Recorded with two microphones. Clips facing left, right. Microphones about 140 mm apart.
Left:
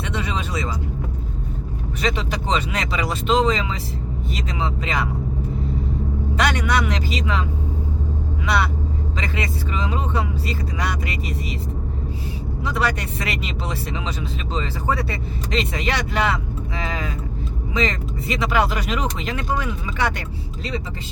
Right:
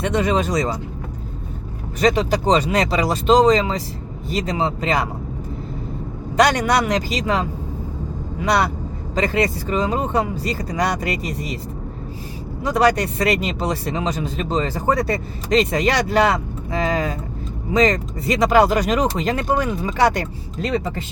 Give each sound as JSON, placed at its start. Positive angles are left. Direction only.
{"t": 0.0, "sound": "speech", "side_deg": -45}
{"t": 2.0, "sound": "speech", "side_deg": -40}
{"t": 6.3, "sound": "speech", "side_deg": -40}
{"t": 12.6, "sound": "speech", "side_deg": -40}